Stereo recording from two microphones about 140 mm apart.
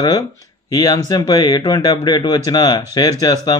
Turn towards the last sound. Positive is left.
turn(degrees=25)  # may be behind; listen again after turning